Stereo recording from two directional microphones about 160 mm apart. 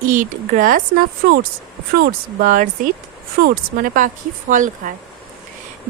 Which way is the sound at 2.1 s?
60° right (ahead or behind).